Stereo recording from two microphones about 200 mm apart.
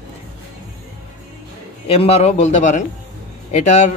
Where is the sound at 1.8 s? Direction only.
30° left (ahead or behind).